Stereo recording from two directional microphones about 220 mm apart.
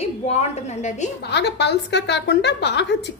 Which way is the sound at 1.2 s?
50° left (ahead or behind).